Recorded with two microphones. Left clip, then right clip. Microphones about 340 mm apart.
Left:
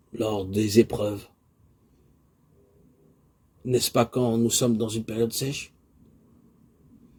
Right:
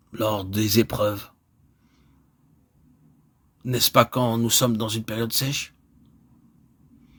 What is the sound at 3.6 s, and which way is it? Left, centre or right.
Speech, right.